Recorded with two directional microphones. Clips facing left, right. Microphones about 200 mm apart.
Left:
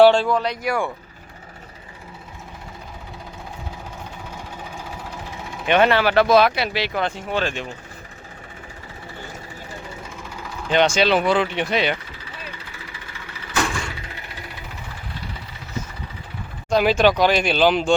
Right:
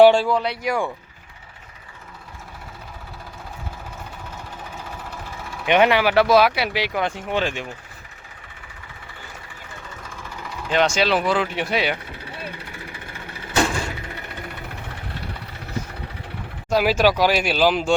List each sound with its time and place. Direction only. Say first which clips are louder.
0.0 s speech: even; 10° right (ahead or behind)
4.9 s vehicle: left 1 dB; 15° left (ahead or behind)
5.6 s speech: even; 15° right (ahead or behind)
10.4 s speech: left 2 dB; centre (ahead or behind)
12.0 s vehicle: right 4 dB; 60° right (ahead or behind)
16.6 s speech: left 1 dB; 5° right (ahead or behind)